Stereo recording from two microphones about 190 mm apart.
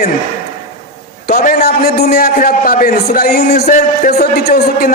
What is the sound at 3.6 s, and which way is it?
Speech, 40° left (ahead or behind).